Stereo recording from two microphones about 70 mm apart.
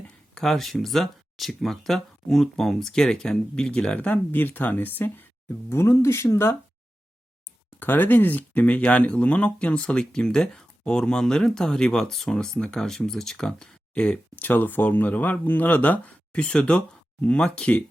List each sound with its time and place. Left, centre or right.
0.3 s speech: centre; by 5.2 s left
5.6 s speech: left
7.8 s speech: left